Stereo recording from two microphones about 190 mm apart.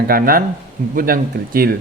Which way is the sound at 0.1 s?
50° right (ahead or behind).